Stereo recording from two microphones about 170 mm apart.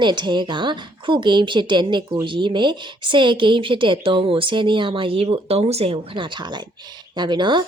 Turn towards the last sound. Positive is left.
turn(degrees=-25)  # may be behind; listen again after turning